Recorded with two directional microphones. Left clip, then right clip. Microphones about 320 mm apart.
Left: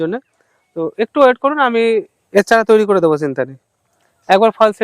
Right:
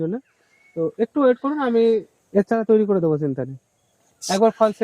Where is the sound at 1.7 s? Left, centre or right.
Centre.